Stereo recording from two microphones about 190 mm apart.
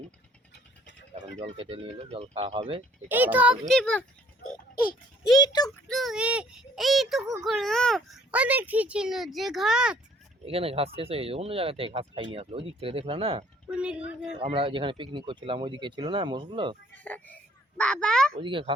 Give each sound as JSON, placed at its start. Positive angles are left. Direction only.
{"t": 1.1, "sound": "speech", "side_deg": -30}
{"t": 3.1, "sound": "a child's voice", "side_deg": -10}
{"t": 5.4, "sound": "speech", "side_deg": 20}
{"t": 5.6, "sound": "a child's voice", "side_deg": 0}
{"t": 10.4, "sound": "speech", "side_deg": -30}
{"t": 13.7, "sound": "a woman's voice", "side_deg": -5}
{"t": 14.3, "sound": "speech", "side_deg": -30}
{"t": 17.0, "sound": "a child's voice", "side_deg": 10}
{"t": 18.3, "sound": "speech", "side_deg": -25}